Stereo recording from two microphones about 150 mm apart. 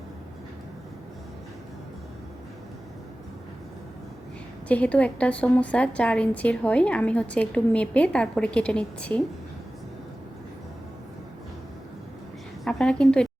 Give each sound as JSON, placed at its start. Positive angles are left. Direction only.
{"t": 4.7, "sound": "a woman's voice", "side_deg": 10}
{"t": 12.6, "sound": "a woman's voice", "side_deg": 5}